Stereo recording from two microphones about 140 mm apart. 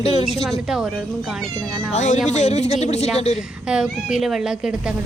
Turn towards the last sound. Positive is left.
turn(degrees=-5)  # may be behind; listen again after turning